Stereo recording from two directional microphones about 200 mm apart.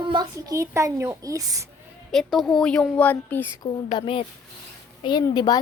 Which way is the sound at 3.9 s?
25° left (ahead or behind).